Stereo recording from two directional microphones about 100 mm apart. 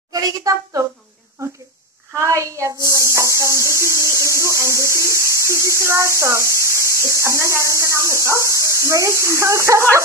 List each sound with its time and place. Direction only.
0.1 s a woman's voice: 40° right (ahead or behind)
2.1 s speech: 30° right (ahead or behind)